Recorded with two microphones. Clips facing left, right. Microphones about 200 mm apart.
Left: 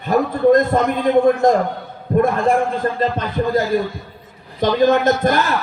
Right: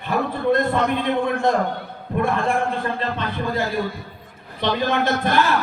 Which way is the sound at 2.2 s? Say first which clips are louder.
Left 5 dB; 40° left (ahead or behind).